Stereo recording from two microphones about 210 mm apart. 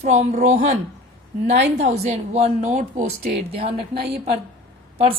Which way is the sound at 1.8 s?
30° right (ahead or behind).